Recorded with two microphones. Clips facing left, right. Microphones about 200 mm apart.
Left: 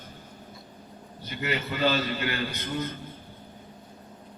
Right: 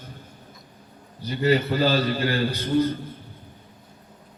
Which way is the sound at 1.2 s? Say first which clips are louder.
Right 10 dB; 35° right (ahead or behind).